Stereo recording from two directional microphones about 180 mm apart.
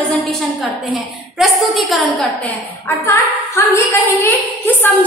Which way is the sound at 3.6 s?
15° left (ahead or behind).